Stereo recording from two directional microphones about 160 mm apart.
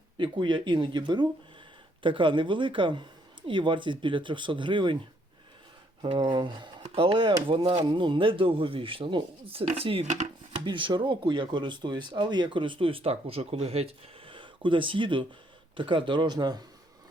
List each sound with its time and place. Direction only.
0.2 s speech: 30° right (ahead or behind)
6.0 s speech: 30° right (ahead or behind); by 10.6 s 50° right (ahead or behind)
10.7 s speech: 30° right (ahead or behind)